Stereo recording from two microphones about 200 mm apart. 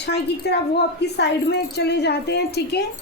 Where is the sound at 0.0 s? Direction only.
55° left (ahead or behind).